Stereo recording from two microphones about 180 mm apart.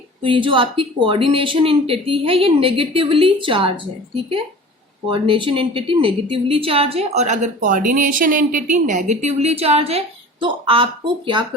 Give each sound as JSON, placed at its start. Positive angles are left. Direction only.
{"t": 0.2, "sound": "speech", "side_deg": -30}
{"t": 5.0, "sound": "a woman's voice", "side_deg": -30}